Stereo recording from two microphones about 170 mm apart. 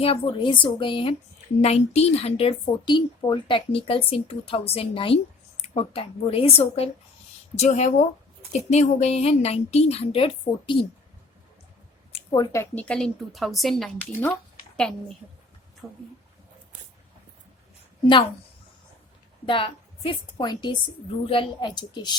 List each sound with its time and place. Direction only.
0.0 s speech: 35° left (ahead or behind)
12.3 s speech: 20° left (ahead or behind); by 14.3 s centre (ahead or behind)
15.8 s speech: 5° left (ahead or behind)
19.5 s a woman's voice: 30° left (ahead or behind)